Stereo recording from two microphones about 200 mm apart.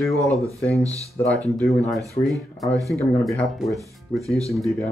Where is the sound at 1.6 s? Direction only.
5° left (ahead or behind).